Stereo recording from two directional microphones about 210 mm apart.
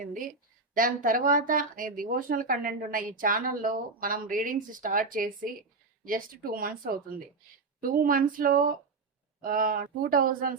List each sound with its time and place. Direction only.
0.0 s speech: 40° right (ahead or behind)